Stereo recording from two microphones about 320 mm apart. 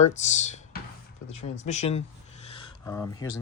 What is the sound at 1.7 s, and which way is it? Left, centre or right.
Speech, left.